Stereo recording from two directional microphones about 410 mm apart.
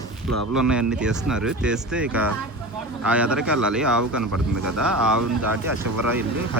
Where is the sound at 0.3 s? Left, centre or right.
Right.